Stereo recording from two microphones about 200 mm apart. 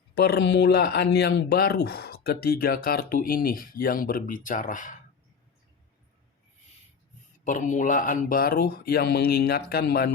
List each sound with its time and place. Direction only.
0.1 s speech: 55° left (ahead or behind)
7.4 s speech: 40° left (ahead or behind)